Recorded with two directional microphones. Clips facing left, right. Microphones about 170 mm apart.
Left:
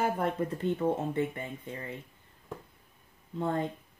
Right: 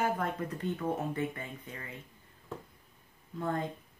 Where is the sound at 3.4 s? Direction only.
25° left (ahead or behind).